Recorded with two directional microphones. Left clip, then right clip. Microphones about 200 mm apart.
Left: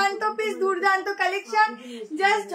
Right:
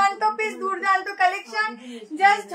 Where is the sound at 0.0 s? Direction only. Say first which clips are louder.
Right 3 dB; 15° left (ahead or behind).